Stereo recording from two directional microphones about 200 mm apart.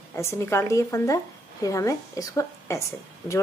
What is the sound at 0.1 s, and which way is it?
A woman's voice, 15° left (ahead or behind).